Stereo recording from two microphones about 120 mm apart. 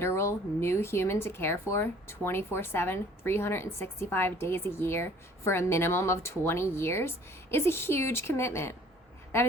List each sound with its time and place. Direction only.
0.0 s speech: 25° left (ahead or behind)